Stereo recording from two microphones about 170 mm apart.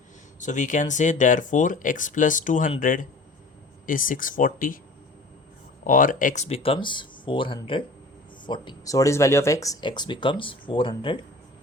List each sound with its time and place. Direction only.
0.3 s speech: 45° left (ahead or behind)
5.8 s speech: 50° left (ahead or behind); by 11.2 s 30° left (ahead or behind)